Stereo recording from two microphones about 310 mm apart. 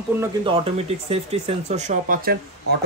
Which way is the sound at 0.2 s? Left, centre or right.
Centre.